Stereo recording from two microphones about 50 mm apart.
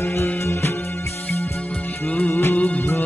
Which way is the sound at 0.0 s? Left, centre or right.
Left.